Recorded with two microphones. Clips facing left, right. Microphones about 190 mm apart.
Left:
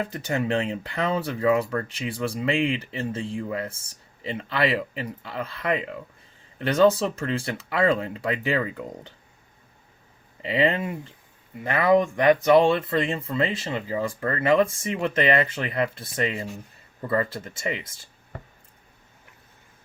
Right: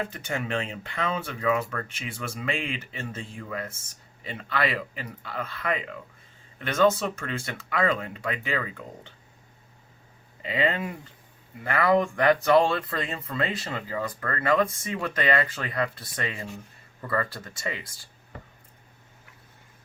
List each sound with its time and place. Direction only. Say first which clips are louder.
0.1 s speech: left 5 dB; 30° left (ahead or behind)
10.4 s speech: left 4 dB; 30° left (ahead or behind)